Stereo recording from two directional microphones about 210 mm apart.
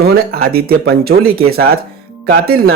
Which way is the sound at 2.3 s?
45° right (ahead or behind).